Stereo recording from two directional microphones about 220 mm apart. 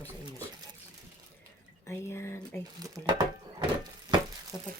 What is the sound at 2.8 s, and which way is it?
Speech, 20° right (ahead or behind).